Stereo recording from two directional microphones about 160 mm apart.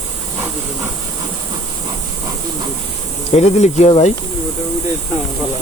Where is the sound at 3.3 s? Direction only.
45° left (ahead or behind).